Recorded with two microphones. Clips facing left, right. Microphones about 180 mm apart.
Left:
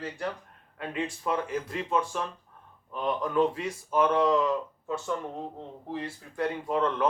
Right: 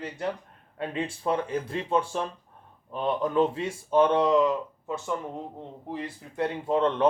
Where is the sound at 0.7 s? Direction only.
30° right (ahead or behind).